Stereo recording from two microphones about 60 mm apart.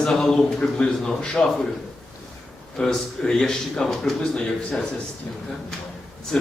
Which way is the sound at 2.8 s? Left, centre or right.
Centre.